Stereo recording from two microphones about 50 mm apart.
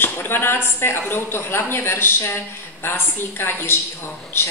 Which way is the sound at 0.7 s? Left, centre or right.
Left.